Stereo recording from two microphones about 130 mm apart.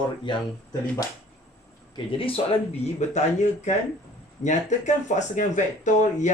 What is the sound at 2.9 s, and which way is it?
Speech, 60° left (ahead or behind).